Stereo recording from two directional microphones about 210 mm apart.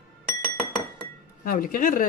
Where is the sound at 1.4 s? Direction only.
40° left (ahead or behind).